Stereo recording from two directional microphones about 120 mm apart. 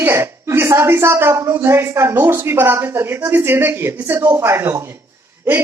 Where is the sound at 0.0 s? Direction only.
20° right (ahead or behind).